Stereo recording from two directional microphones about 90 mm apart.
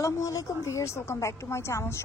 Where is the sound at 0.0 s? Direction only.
35° left (ahead or behind).